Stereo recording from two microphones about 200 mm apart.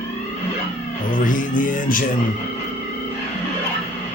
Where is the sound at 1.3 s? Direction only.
40° left (ahead or behind).